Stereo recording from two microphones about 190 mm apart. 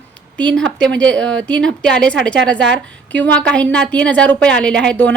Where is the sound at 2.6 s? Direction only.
70° right (ahead or behind).